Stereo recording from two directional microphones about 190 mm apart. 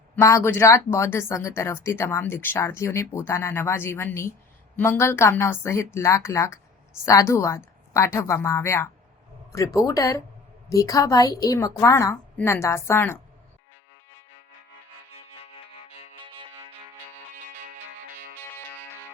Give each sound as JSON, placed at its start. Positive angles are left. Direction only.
{"t": 0.2, "sound": "speech", "side_deg": 15}
{"t": 15.1, "sound": "music", "side_deg": 35}